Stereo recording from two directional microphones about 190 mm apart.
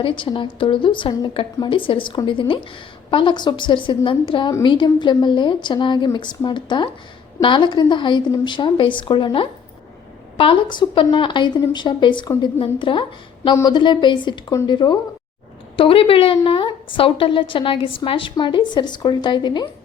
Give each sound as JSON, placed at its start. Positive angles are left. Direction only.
{"t": 0.0, "sound": "a woman's voice", "side_deg": 25}